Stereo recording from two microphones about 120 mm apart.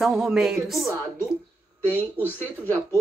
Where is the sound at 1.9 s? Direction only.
15° left (ahead or behind).